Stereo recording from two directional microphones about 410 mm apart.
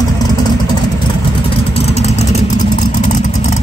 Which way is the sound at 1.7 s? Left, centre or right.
Centre.